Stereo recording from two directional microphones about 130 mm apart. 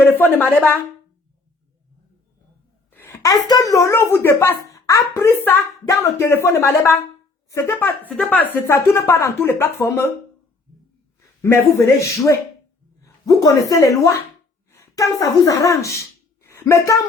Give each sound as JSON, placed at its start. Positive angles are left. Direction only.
{"t": 0.0, "sound": "a woman's voice", "side_deg": 15}
{"t": 2.9, "sound": "a woman's voice", "side_deg": 20}
{"t": 11.4, "sound": "speech", "side_deg": 20}
{"t": 13.0, "sound": "a sound", "side_deg": 25}
{"t": 13.7, "sound": "speech", "side_deg": 25}